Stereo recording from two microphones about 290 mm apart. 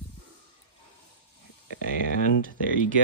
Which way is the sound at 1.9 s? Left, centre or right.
Left.